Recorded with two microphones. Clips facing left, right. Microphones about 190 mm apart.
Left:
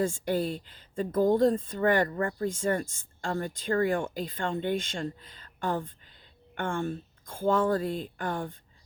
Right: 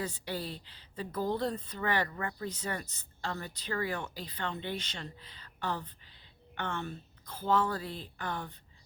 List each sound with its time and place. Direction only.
0.0 s speech: 45° left (ahead or behind)